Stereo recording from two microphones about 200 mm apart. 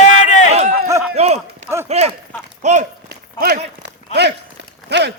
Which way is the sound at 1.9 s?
35° right (ahead or behind).